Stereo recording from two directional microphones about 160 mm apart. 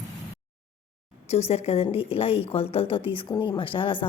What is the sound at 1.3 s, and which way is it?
A woman's voice, 40° left (ahead or behind).